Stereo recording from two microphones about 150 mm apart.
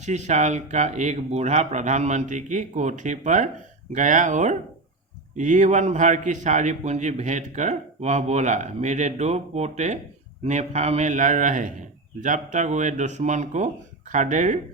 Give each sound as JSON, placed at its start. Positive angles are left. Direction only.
{"t": 0.0, "sound": "a man's voice", "side_deg": -50}